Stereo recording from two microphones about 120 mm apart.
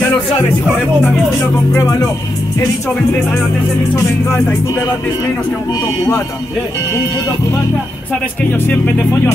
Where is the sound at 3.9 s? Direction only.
20° left (ahead or behind).